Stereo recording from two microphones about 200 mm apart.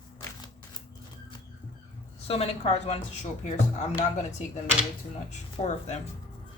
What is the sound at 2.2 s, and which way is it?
Speech, 30° left (ahead or behind).